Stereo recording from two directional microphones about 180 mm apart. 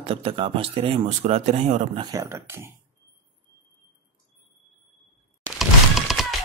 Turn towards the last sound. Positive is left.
turn(degrees=0)  # may be behind; listen again after turning